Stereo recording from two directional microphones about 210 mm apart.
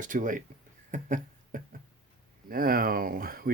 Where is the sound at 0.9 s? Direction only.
40° right (ahead or behind).